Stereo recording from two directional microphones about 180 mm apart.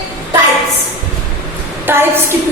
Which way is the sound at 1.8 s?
10° right (ahead or behind).